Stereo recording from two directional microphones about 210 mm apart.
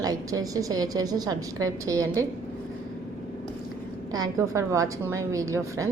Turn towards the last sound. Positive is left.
turn(degrees=-15)  # may be behind; listen again after turning